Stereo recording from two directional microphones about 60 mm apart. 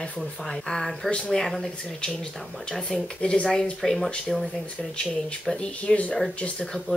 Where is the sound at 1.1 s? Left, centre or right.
Centre.